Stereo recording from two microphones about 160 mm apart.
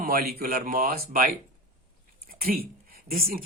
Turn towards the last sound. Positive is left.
turn(degrees=-65)  # may be behind; listen again after turning